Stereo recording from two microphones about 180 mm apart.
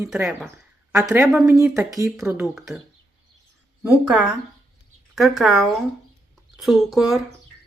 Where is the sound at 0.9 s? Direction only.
15° right (ahead or behind).